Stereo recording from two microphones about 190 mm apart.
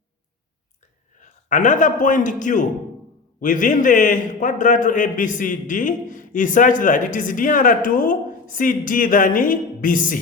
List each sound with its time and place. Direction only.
1.2 s a man's voice: 40° left (ahead or behind)